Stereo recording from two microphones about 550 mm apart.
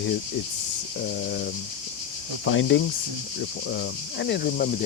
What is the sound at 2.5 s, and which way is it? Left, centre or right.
Speech, left.